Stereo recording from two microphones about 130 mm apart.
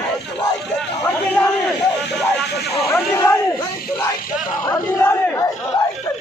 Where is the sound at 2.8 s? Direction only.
20° left (ahead or behind).